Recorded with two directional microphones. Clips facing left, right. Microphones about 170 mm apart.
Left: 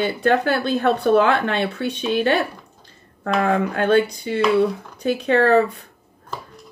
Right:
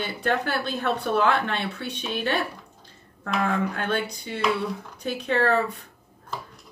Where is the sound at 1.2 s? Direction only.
90° left.